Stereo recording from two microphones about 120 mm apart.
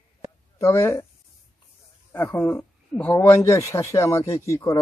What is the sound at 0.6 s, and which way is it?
Speech, 20° left (ahead or behind).